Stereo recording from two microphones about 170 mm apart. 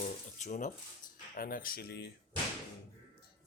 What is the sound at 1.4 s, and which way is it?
Speech, 60° left (ahead or behind).